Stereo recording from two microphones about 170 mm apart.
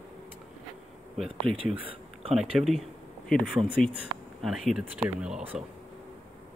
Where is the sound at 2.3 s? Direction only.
Centre (ahead or behind).